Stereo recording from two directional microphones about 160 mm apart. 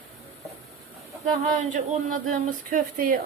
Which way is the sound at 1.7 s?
55° right (ahead or behind).